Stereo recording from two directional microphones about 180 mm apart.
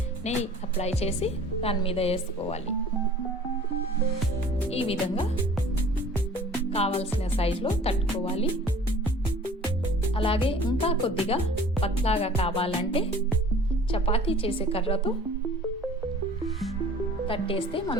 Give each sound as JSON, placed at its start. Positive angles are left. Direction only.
{"t": 0.3, "sound": "speech", "side_deg": 40}
{"t": 4.7, "sound": "speech", "side_deg": 35}
{"t": 6.7, "sound": "speech", "side_deg": 35}
{"t": 10.2, "sound": "speech", "side_deg": 30}
{"t": 17.2, "sound": "a woman's voice", "side_deg": 30}